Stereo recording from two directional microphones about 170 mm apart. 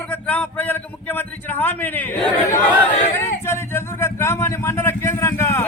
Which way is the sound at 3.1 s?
15° left (ahead or behind).